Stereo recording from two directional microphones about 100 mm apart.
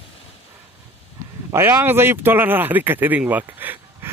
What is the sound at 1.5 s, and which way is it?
Speech, 25° right (ahead or behind).